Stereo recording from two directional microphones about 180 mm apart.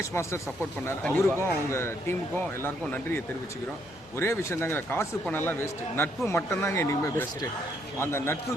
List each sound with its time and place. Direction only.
0.1 s a man's voice: 15° left (ahead or behind)